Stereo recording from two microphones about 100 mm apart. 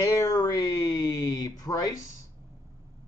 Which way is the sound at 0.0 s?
35° left (ahead or behind).